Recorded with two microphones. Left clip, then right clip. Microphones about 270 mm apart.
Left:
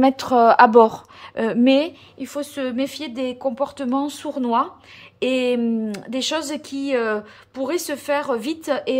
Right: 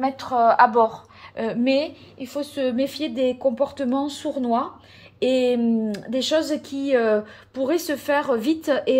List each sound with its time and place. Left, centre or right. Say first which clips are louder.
0.0 s a woman's voice: left 4 dB; left
1.3 s a woman's voice: left 4 dB; centre